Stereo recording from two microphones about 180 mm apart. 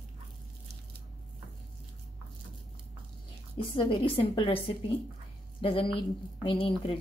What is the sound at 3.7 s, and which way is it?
A woman's voice, 30° left (ahead or behind).